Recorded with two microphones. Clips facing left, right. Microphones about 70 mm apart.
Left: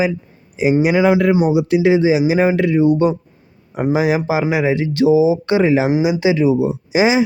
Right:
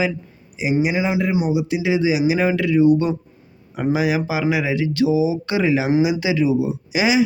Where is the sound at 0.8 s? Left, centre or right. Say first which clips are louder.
Left 7 dB; left.